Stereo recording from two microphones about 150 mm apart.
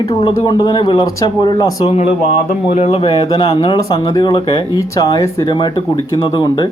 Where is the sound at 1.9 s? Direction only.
45° left (ahead or behind); by 6.6 s 30° left (ahead or behind).